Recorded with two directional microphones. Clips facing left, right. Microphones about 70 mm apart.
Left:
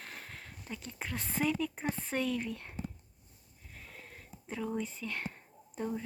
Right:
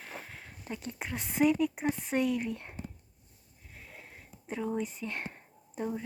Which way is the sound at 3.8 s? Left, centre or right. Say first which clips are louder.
Right 1 dB; centre.